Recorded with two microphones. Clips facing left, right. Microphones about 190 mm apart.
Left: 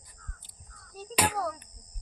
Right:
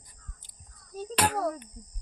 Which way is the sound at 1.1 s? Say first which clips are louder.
Right 1 dB; 10° left (ahead or behind).